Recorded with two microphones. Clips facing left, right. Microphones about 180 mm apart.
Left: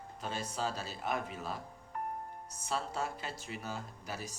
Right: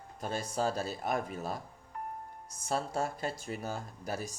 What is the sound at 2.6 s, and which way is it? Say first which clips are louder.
Speech: right 4 dB; 45° right (ahead or behind).